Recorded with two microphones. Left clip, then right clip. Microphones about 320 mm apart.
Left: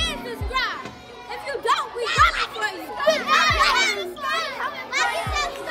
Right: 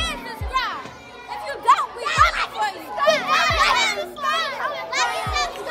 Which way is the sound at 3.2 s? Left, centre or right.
Centre.